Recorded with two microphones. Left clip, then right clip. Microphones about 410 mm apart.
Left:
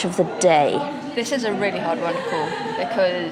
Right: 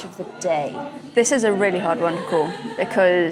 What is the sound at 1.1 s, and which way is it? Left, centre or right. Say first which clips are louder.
A woman's voice: right 7 dB; right.